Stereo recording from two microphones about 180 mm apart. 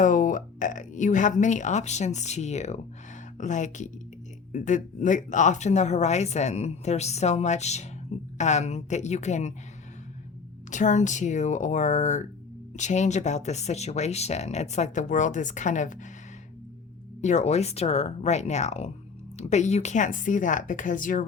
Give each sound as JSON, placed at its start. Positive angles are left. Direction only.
{"t": 0.0, "sound": "speech", "side_deg": 45}
{"t": 10.7, "sound": "speech", "side_deg": 40}
{"t": 17.2, "sound": "speech", "side_deg": 40}